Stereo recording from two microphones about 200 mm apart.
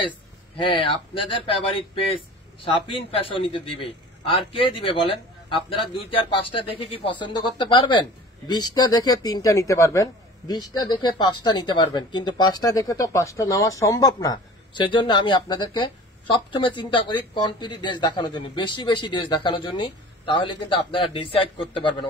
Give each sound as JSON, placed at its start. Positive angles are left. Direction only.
{"t": 0.6, "sound": "speech", "side_deg": 25}